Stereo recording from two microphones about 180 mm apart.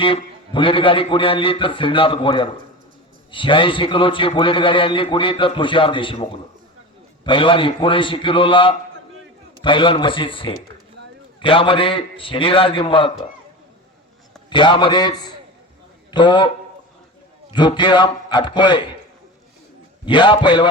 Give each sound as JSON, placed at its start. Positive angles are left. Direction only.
{"t": 0.0, "sound": "a man's voice", "side_deg": 30}
{"t": 7.3, "sound": "a man's voice", "side_deg": 30}
{"t": 14.5, "sound": "a man's voice", "side_deg": 25}
{"t": 17.5, "sound": "a man's voice", "side_deg": 25}
{"t": 20.1, "sound": "a man's voice", "side_deg": 25}